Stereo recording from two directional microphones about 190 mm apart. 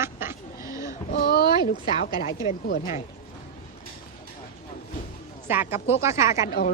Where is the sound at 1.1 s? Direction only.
55° left (ahead or behind).